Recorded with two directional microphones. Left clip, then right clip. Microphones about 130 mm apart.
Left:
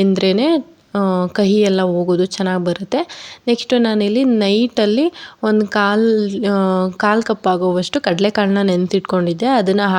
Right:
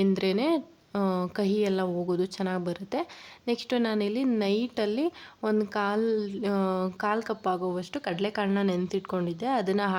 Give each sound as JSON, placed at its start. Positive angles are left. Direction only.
{"t": 0.0, "sound": "a woman's voice", "side_deg": 30}